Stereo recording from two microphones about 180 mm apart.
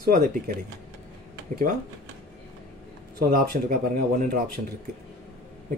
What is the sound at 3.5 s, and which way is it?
Speech, 45° right (ahead or behind).